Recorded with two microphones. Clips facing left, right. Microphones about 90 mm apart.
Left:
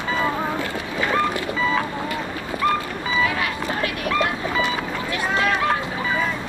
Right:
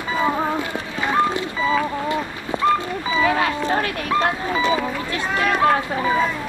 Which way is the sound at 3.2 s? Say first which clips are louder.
Right 6 dB; 30° right (ahead or behind).